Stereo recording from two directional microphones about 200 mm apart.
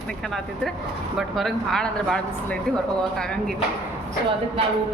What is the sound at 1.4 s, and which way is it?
A woman's voice, centre (ahead or behind).